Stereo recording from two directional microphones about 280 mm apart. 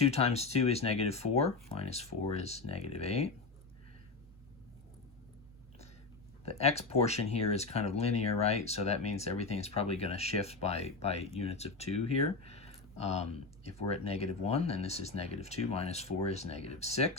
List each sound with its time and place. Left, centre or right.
0.0 s speech: left
6.4 s speech: left
12.5 s a sound: left
13.7 s speech: left